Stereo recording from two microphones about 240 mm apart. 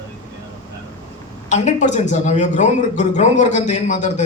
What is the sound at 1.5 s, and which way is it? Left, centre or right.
A man's voice, left.